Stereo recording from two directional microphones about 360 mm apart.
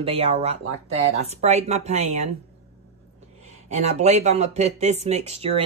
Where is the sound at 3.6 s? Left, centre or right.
Centre.